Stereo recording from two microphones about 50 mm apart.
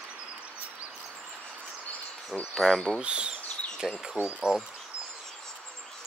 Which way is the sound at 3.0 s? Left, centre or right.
Right.